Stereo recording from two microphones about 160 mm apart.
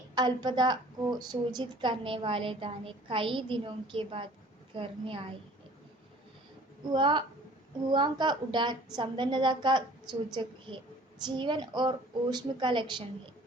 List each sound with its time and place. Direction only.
0.1 s a woman's voice: 25° right (ahead or behind)
6.9 s a woman's voice: 30° right (ahead or behind)
11.3 s a woman's voice: 30° right (ahead or behind)